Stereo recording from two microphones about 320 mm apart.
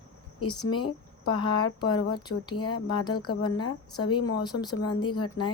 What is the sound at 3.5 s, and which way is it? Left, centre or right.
Speech, left.